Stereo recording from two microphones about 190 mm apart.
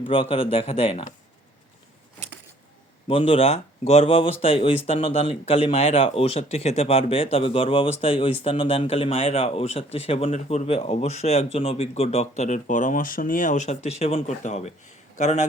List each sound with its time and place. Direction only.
0.1 s speech: 30° left (ahead or behind)
3.1 s speech: 30° left (ahead or behind)